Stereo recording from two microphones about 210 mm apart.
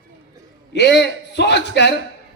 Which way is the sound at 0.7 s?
55° left (ahead or behind).